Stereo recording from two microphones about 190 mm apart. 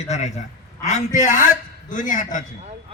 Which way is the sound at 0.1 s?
35° left (ahead or behind).